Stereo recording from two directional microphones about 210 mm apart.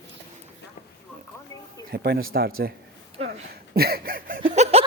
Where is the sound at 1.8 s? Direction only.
50° right (ahead or behind).